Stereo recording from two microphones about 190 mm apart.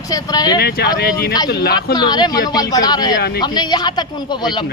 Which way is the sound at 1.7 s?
20° left (ahead or behind).